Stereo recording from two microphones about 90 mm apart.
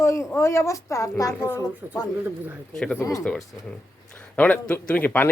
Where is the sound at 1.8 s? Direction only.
30° right (ahead or behind).